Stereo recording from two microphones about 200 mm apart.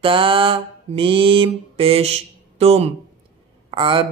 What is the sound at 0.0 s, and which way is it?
Mantra, 25° right (ahead or behind).